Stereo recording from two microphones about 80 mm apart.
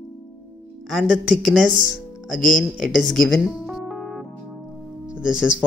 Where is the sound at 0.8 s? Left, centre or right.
Centre.